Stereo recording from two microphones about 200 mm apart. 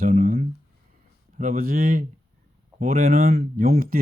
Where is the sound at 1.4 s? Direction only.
45° right (ahead or behind).